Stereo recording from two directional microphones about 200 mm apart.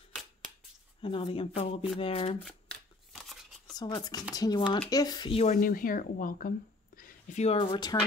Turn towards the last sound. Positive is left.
turn(degrees=20)  # may be behind; listen again after turning